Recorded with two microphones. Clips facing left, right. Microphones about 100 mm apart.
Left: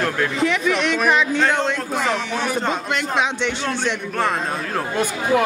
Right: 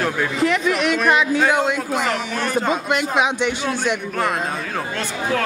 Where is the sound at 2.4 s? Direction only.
Centre (ahead or behind).